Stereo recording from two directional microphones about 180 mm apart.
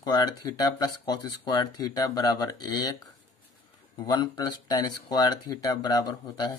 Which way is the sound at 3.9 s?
20° left (ahead or behind).